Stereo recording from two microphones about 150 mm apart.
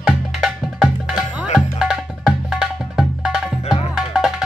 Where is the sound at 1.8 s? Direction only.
Centre (ahead or behind).